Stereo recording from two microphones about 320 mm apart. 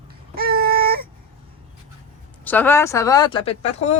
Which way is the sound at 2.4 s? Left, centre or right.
Centre.